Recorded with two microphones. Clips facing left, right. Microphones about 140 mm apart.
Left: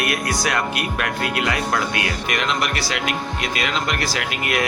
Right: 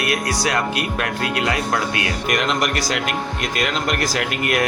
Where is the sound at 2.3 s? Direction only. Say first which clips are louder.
Right 3 dB; 45° right (ahead or behind).